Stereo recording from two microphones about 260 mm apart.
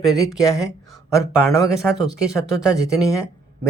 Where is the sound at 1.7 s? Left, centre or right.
Centre.